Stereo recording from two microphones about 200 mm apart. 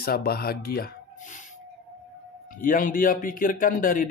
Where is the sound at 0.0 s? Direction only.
50° left (ahead or behind).